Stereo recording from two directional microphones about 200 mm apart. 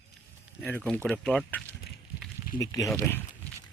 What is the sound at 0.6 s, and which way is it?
Speech, 10° left (ahead or behind).